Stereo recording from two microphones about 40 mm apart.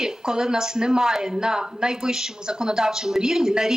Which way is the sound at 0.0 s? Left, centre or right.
Centre.